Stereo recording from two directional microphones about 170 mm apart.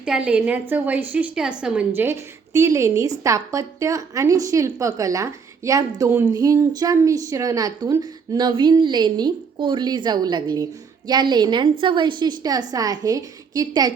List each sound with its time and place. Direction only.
0.0 s a woman's voice: 5° right (ahead or behind); by 13.9 s 20° right (ahead or behind)